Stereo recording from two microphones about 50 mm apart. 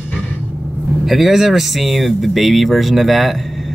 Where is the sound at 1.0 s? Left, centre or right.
Centre.